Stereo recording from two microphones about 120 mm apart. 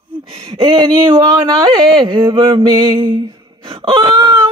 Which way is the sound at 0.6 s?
35° right (ahead or behind).